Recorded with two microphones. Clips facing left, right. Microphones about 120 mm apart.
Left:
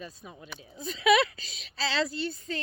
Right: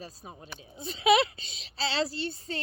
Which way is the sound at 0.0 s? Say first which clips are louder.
Left 1 dB; 35° right (ahead or behind).